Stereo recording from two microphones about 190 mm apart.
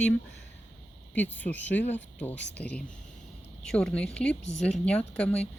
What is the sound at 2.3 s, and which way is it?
Speech, 65° left (ahead or behind).